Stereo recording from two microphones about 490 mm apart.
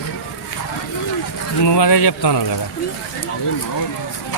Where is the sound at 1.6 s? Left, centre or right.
Left.